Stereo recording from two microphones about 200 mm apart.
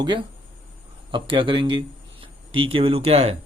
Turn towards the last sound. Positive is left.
turn(degrees=-30)  # may be behind; listen again after turning